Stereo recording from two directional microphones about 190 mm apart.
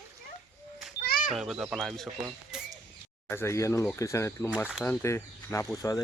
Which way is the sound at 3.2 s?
15° left (ahead or behind).